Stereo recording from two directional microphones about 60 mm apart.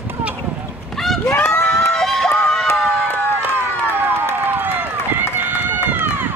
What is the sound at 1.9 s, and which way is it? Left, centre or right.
Run, centre.